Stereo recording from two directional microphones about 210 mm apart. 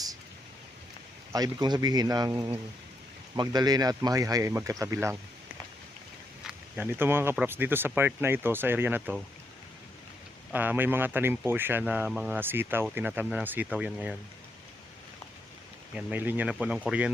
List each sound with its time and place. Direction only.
1.3 s speech: 20° right (ahead or behind)
6.5 s speech: 10° right (ahead or behind)
10.5 s speech: 10° right (ahead or behind)
16.0 s speech: 5° right (ahead or behind)